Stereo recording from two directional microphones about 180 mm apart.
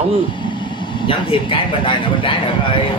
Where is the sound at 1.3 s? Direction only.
30° left (ahead or behind).